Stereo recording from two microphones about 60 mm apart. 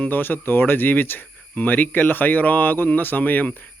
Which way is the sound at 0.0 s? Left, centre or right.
Left.